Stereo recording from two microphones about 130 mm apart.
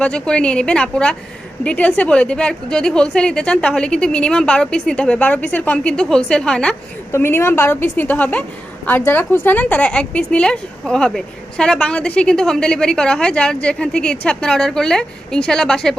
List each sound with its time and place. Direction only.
0.0 s a woman's voice: 5° left (ahead or behind)
7.1 s a woman's voice: 20° left (ahead or behind)